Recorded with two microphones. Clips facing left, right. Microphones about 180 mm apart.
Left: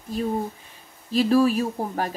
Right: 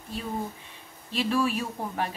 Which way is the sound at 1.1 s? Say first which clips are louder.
Left 7 dB; 40° left (ahead or behind).